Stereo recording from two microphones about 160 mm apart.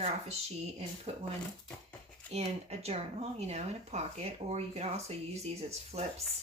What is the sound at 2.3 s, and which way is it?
Speech, 40° right (ahead or behind).